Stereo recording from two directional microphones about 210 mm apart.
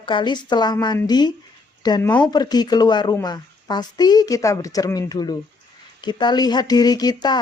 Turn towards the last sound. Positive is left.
turn(degrees=20)  # may be behind; listen again after turning